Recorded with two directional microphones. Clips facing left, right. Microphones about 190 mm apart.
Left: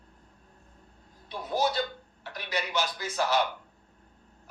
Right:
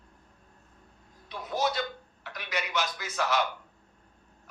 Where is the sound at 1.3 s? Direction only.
30° left (ahead or behind).